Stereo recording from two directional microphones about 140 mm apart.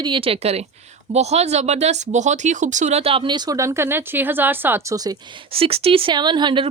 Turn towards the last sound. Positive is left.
turn(degrees=-35)  # may be behind; listen again after turning